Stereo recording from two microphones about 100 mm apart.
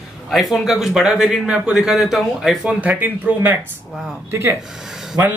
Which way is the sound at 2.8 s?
15° right (ahead or behind).